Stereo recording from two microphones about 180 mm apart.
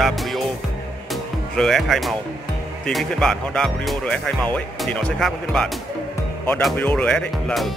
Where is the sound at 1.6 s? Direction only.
Centre (ahead or behind).